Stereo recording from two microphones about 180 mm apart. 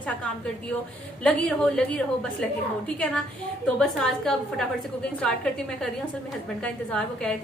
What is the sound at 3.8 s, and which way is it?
A woman's voice, 5° left (ahead or behind).